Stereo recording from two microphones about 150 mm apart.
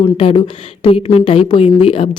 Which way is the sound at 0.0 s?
35° left (ahead or behind).